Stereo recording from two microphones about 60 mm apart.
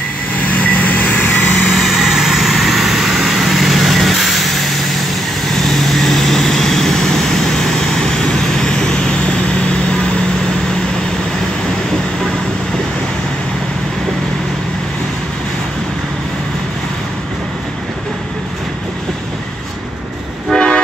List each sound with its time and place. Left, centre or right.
0.5 s vehicle: left
1.7 s vehicle: centre
20.5 s toot: centre